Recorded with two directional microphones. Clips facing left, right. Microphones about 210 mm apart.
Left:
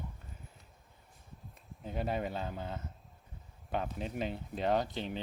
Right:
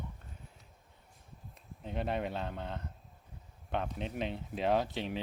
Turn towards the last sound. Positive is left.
turn(degrees=0)  # may be behind; listen again after turning